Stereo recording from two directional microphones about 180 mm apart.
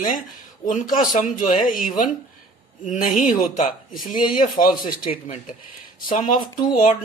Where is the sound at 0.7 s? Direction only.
45° left (ahead or behind).